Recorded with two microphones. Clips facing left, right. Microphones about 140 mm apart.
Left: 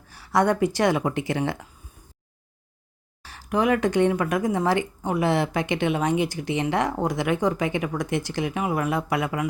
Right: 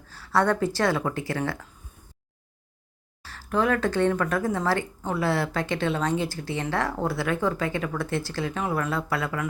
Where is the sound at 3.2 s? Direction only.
15° left (ahead or behind).